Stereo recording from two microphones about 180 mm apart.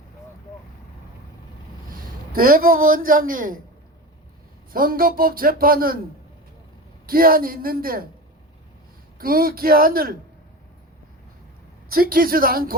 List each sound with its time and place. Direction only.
1.9 s a man's voice: 55° right (ahead or behind)
4.7 s a man's voice: 55° right (ahead or behind)
7.1 s a man's voice: 55° right (ahead or behind)
9.1 s speech: 55° right (ahead or behind)
11.9 s a man's voice: 55° right (ahead or behind)